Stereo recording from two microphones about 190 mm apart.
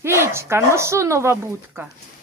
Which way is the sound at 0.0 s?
15° right (ahead or behind).